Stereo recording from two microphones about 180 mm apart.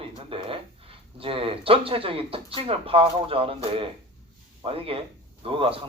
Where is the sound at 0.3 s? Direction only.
30° right (ahead or behind).